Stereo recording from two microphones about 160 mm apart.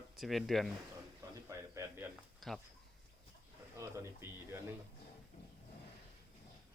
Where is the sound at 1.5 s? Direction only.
20° right (ahead or behind).